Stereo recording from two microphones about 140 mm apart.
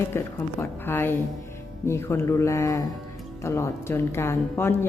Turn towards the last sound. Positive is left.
turn(degrees=20)  # may be behind; listen again after turning